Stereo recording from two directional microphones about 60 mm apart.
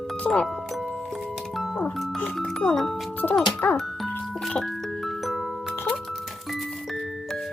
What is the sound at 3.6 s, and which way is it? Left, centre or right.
Speech, left.